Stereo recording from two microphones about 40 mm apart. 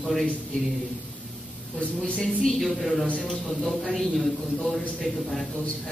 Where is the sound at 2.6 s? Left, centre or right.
Centre.